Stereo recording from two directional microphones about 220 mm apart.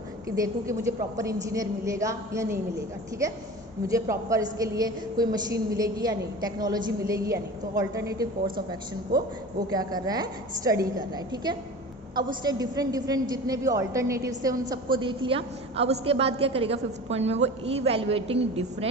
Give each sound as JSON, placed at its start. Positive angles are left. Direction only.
{"t": 0.3, "sound": "a woman's voice", "side_deg": -15}
{"t": 3.8, "sound": "a woman's voice", "side_deg": -15}